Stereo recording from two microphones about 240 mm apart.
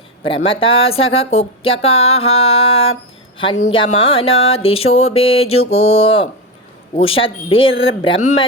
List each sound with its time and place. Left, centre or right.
0.3 s speech: left